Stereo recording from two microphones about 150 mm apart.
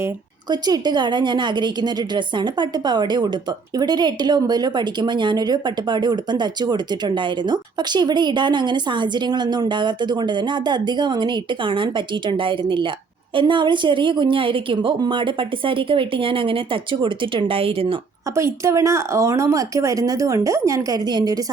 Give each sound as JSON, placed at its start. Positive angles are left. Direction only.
{"t": 0.5, "sound": "a woman's voice", "side_deg": -25}
{"t": 18.3, "sound": "a woman's voice", "side_deg": -20}